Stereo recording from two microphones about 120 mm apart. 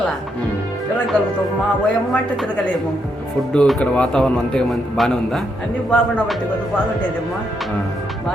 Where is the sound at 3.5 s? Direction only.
10° left (ahead or behind).